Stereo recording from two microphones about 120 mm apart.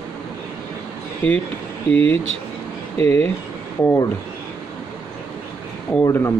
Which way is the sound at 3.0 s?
60° right (ahead or behind).